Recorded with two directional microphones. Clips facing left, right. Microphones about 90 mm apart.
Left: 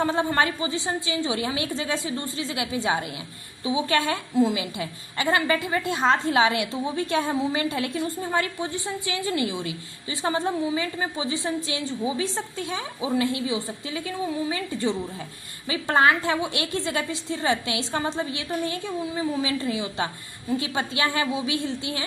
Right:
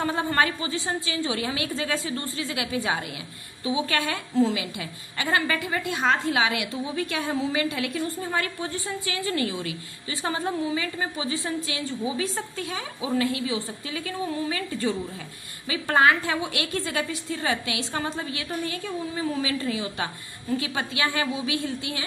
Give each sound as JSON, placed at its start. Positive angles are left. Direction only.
{"t": 0.0, "sound": "a woman's voice", "side_deg": 25}
{"t": 8.0, "sound": "a woman's voice", "side_deg": 20}